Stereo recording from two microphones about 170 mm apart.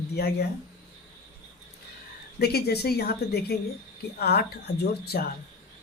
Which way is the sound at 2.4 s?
70° left (ahead or behind).